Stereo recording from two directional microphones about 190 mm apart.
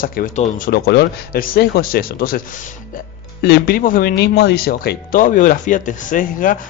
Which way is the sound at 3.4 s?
55° left (ahead or behind).